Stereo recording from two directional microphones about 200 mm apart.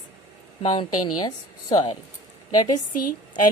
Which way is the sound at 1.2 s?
20° left (ahead or behind).